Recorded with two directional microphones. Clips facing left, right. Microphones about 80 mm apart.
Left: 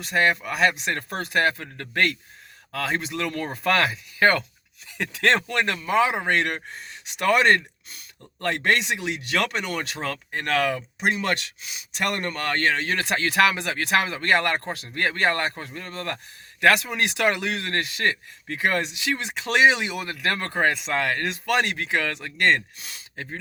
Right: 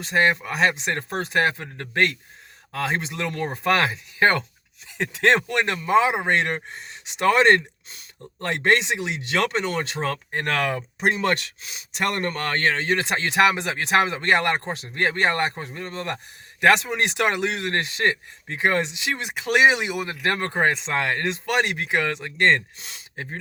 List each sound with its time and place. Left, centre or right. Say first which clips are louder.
0.0 s speech: right 1 dB; right